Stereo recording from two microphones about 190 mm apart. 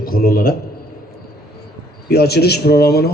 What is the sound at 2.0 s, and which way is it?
Speech, 55° left (ahead or behind).